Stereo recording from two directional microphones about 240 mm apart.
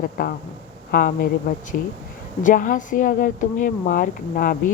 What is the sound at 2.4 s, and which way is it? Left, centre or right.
Speech, left.